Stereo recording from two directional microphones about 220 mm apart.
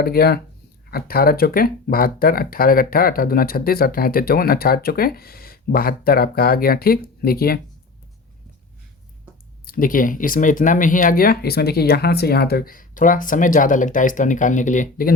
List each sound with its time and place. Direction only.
0.0 s speech: 45° left (ahead or behind)
9.6 s speech: 40° left (ahead or behind)